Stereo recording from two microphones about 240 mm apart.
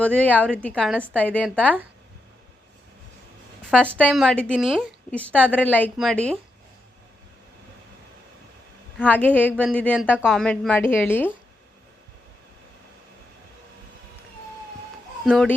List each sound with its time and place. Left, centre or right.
0.0 s a woman's voice: centre
1.1 s speech: centre
3.7 s a woman's voice: centre
9.0 s speech: centre
15.2 s a child's voice: centre